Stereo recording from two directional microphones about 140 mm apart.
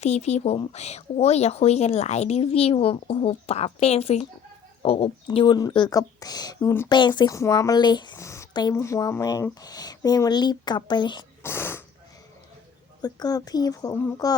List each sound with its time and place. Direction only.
0.0 s speech: 50° left (ahead or behind)
5.5 s speech: 30° left (ahead or behind)
6.8 s speech: 30° left (ahead or behind)
11.4 s speech: 15° left (ahead or behind)
13.0 s speech: 30° left (ahead or behind)